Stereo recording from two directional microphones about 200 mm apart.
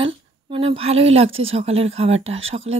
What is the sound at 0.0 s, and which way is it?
A woman's voice, 25° right (ahead or behind).